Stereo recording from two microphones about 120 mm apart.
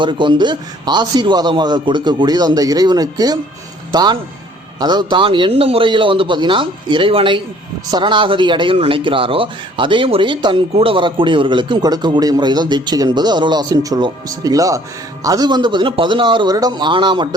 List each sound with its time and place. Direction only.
0.0 s a man's voice: 40° right (ahead or behind)